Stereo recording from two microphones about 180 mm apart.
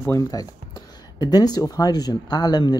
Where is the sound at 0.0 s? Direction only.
15° left (ahead or behind).